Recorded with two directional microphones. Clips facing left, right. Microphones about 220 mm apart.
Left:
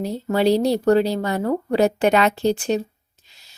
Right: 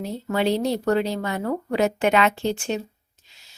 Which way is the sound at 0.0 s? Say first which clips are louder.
Left 4 dB; 35° left (ahead or behind).